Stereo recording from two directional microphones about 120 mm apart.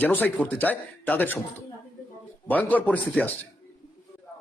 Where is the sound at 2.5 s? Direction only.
15° left (ahead or behind).